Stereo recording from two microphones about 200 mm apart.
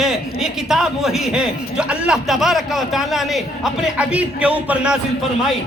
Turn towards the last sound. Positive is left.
turn(degrees=-5)  # may be behind; listen again after turning